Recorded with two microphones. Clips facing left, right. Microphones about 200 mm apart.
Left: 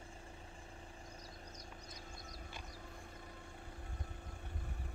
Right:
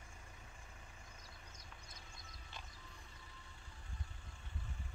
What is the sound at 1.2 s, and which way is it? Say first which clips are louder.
Vehicle: left 7 dB; 40° left (ahead or behind).